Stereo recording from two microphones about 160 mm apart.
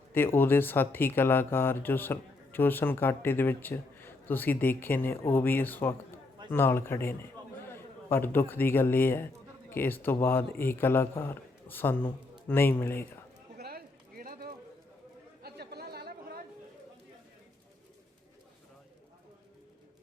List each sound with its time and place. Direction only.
0.1 s a man's voice: 15° left (ahead or behind)
13.6 s a sound: 70° right (ahead or behind)
15.4 s chatter: 85° right